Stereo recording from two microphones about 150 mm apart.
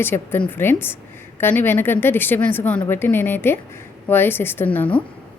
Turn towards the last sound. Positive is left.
turn(degrees=10)  # may be behind; listen again after turning